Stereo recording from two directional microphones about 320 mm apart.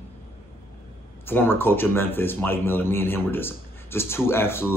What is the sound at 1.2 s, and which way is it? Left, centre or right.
Speech, centre.